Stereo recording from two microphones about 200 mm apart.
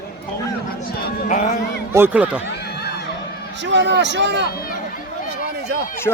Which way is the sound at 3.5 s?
65° right (ahead or behind).